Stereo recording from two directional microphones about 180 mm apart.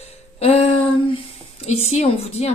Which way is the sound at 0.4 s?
35° left (ahead or behind).